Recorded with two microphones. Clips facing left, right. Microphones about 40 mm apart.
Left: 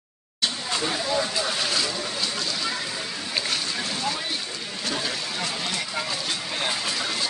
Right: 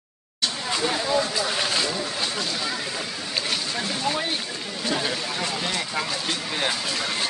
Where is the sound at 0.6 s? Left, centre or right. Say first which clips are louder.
Right 4 dB; centre.